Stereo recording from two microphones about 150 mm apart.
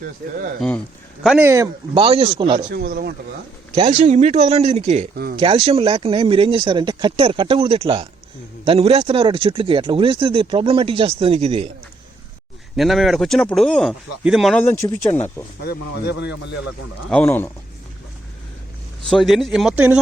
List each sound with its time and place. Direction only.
1.4 s speech: 20° right (ahead or behind)
2.0 s speech: 35° right (ahead or behind)
2.6 s speech: 85° right
3.8 s speech: 40° right (ahead or behind)
12.7 s speech: centre (ahead or behind)
14.6 s speech: 15° left (ahead or behind)
15.6 s speech: 90° left
17.1 s speech: 10° left (ahead or behind)
19.0 s speech: centre (ahead or behind)